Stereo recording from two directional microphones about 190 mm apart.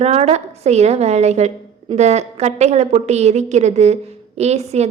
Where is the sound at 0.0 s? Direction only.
35° right (ahead or behind).